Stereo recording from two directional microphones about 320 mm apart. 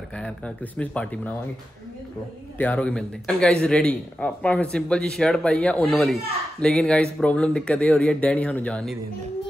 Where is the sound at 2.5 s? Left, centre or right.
Centre.